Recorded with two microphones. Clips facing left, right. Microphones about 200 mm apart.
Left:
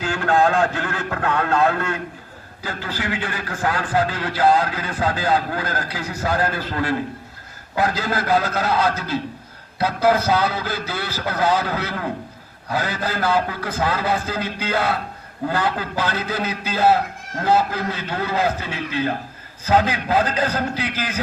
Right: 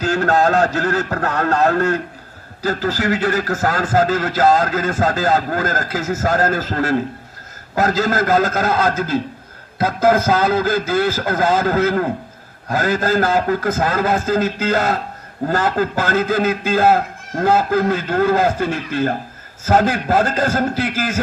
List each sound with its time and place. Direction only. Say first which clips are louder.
0.0 s a man's voice: right 3 dB; 40° right (ahead or behind)